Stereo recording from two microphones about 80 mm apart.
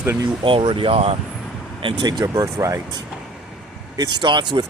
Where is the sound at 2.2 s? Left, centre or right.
Right.